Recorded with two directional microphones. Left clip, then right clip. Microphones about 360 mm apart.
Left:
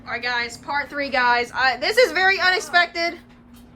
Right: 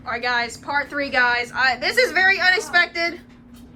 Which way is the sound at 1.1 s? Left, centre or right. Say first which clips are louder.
Left 1 dB; left.